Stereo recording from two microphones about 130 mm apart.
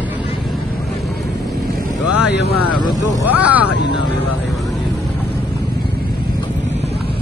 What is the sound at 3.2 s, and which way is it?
Speech, 10° right (ahead or behind).